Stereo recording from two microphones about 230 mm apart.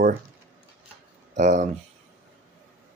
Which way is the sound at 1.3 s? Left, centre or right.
Right.